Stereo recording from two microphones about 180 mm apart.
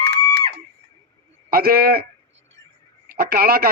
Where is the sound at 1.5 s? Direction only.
55° right (ahead or behind).